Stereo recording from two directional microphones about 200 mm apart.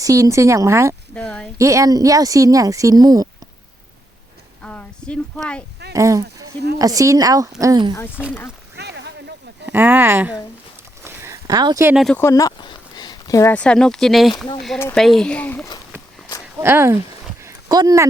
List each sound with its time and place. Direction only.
0.0 s speech: 15° right (ahead or behind)
1.1 s speech: 5° left (ahead or behind)
1.5 s speech: 15° right (ahead or behind)
4.6 s speech: 5° left (ahead or behind)
5.9 s speech: 15° right (ahead or behind)
8.7 s a sound: 55° right (ahead or behind)
9.6 s speech: 10° right (ahead or behind)
11.0 s a sound: 15° right (ahead or behind)
11.9 s speech: 5° left (ahead or behind)
14.8 s speech: 10° left (ahead or behind)
16.6 s speech: 10° right (ahead or behind)
17.4 s a sound: 20° right (ahead or behind)